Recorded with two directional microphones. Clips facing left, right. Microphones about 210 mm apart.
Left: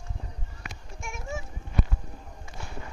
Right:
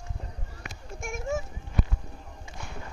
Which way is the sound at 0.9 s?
45° right (ahead or behind).